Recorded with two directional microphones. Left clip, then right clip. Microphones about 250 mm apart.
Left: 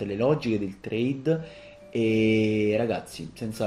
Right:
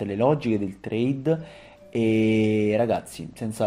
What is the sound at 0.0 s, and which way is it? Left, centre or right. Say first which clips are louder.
Speech: right 2 dB; right.